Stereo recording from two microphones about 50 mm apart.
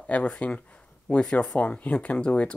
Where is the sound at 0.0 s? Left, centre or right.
Left.